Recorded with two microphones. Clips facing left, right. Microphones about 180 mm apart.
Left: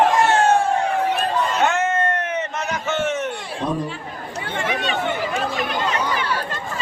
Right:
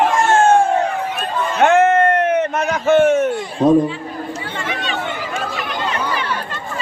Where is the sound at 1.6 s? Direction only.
55° right (ahead or behind).